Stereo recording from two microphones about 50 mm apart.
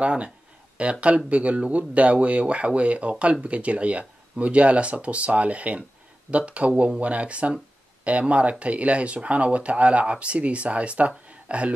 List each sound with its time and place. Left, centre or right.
0.0 s speech: right